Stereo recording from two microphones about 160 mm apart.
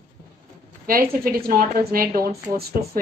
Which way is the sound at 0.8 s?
65° right (ahead or behind).